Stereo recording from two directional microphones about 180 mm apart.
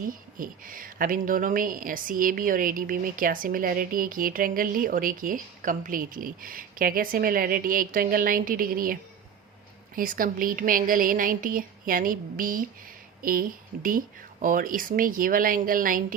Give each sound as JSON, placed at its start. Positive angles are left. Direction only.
{"t": 0.0, "sound": "speech", "side_deg": -50}